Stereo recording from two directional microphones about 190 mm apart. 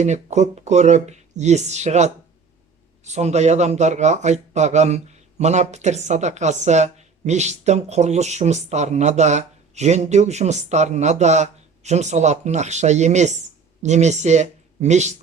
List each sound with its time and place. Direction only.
0.0 s speech: 35° right (ahead or behind)